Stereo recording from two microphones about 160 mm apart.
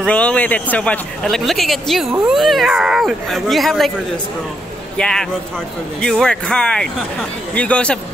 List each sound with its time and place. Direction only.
0.0 s a man's voice: 5° left (ahead or behind)
4.9 s speech: 5° left (ahead or behind)